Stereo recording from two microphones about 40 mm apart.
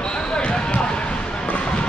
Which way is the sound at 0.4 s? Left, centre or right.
Left.